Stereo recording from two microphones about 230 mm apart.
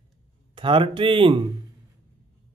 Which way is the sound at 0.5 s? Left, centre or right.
Right.